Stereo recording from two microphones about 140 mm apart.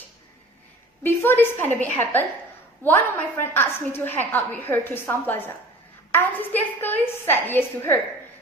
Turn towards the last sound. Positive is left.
turn(degrees=15)  # may be behind; listen again after turning